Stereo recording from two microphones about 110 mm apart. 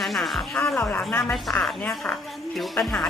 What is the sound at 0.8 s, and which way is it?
Speech, 15° left (ahead or behind).